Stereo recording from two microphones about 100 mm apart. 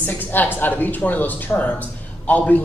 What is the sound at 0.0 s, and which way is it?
Speech, 20° left (ahead or behind).